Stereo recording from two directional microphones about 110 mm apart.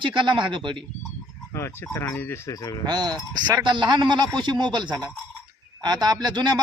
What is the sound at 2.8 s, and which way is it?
A man's voice, 40° right (ahead or behind).